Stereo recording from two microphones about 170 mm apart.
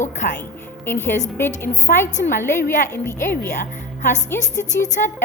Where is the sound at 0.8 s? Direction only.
10° left (ahead or behind).